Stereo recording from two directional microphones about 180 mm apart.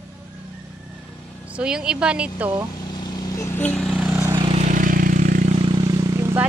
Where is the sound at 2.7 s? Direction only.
25° left (ahead or behind).